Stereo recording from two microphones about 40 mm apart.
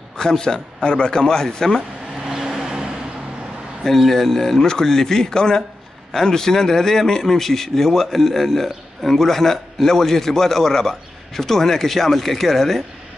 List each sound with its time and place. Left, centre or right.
0.2 s a man's voice: centre
2.2 s vehicle: centre
4.1 s a man's voice: centre